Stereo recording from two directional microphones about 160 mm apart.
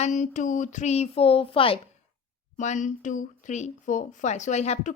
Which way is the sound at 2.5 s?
50° left (ahead or behind).